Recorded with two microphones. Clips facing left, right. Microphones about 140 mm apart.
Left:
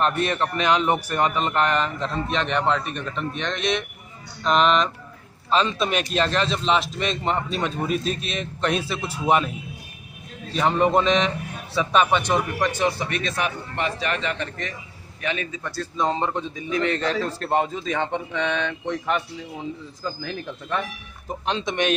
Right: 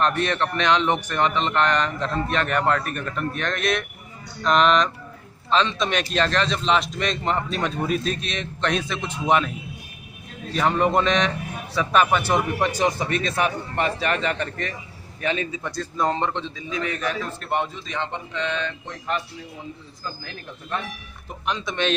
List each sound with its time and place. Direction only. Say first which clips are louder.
0.3 s a man's voice: even; 5° left (ahead or behind)
10.5 s a man's voice: left 1 dB; centre (ahead or behind)
13.1 s a man's voice: right 3 dB; 40° right (ahead or behind)
15.2 s a man's voice: right 3 dB; 30° right (ahead or behind)
15.7 s a man's voice: even; 5° left (ahead or behind)
16.4 s a man's voice: left 4 dB; 60° left (ahead or behind); by 17.2 s 80° left
17.9 s speech: left 2 dB; 60° left (ahead or behind)
21.5 s speech: left 2 dB; 30° left (ahead or behind)